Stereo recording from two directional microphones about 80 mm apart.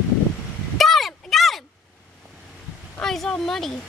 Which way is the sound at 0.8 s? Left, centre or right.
Centre.